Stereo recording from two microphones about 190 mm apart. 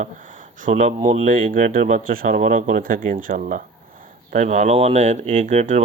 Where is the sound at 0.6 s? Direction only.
40° right (ahead or behind).